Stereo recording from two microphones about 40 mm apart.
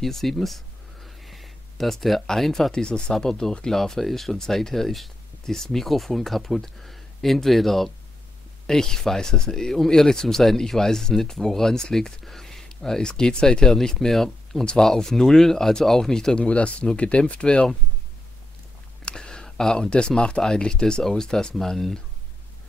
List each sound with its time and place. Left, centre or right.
0.0 s speech: centre
1.0 s a sound: centre
2.2 s speech: centre
2.7 s speech: centre
12.3 s a sound: centre
12.6 s speech: centre
13.8 s speech: centre
14.6 s speech: left
14.9 s speech: centre
16.3 s speech: left
19.0 s a sound: left
19.9 s speech: left